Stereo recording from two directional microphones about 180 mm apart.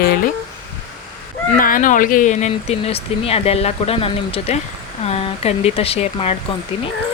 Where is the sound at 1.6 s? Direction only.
50° left (ahead or behind).